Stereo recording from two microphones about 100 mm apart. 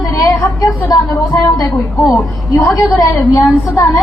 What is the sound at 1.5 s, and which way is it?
A woman's voice, 40° left (ahead or behind).